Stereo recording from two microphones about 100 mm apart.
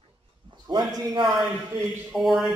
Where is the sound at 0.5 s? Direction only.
50° right (ahead or behind).